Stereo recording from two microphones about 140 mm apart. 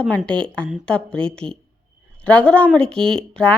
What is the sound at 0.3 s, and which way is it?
A woman's voice, 5° left (ahead or behind).